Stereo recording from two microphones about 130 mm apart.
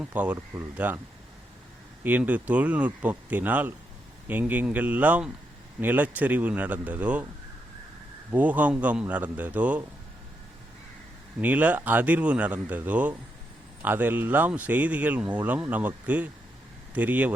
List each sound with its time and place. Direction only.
0.0 s speech: 10° right (ahead or behind)
0.3 s speech: 25° right (ahead or behind)
2.0 s speech: 10° right (ahead or behind)
8.3 s speech: 10° right (ahead or behind)
11.3 s speech: 10° right (ahead or behind)